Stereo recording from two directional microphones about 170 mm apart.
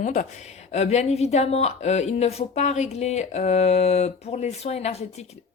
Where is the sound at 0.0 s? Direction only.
45° left (ahead or behind).